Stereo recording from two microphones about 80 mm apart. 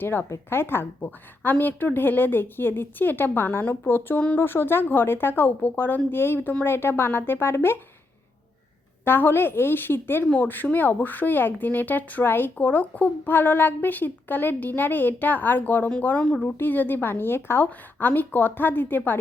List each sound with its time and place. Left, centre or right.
0.0 s speech: left
9.0 s speech: left